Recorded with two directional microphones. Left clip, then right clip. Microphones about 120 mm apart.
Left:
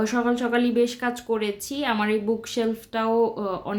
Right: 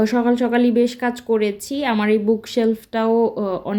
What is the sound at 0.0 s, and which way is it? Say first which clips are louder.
Speech: right 6 dB; 40° right (ahead or behind).